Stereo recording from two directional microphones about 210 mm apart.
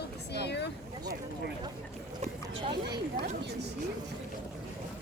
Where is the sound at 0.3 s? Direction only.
55° left (ahead or behind).